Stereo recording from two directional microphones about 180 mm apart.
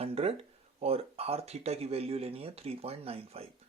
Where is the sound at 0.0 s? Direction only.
35° right (ahead or behind).